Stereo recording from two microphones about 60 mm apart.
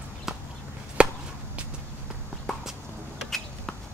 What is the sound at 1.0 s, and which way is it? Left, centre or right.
Chop, right.